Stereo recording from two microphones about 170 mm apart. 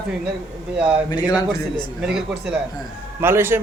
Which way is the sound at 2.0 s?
5° right (ahead or behind).